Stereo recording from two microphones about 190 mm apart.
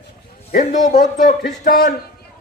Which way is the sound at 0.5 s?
40° left (ahead or behind).